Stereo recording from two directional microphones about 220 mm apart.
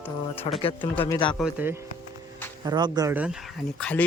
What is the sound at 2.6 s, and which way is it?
Speech, 20° right (ahead or behind).